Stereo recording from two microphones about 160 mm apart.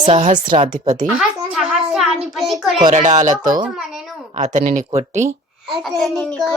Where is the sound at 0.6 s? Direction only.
50° right (ahead or behind).